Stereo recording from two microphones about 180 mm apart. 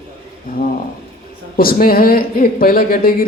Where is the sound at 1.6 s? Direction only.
55° left (ahead or behind).